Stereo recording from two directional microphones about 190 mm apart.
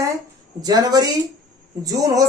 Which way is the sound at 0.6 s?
20° right (ahead or behind).